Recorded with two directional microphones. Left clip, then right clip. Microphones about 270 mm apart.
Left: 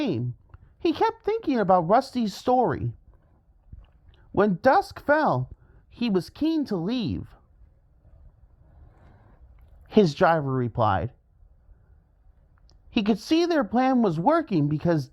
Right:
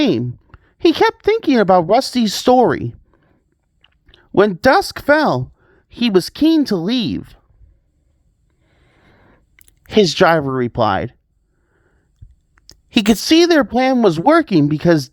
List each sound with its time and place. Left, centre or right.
0.0 s a woman's voice: right
9.0 s a sound: right
12.5 s speech: right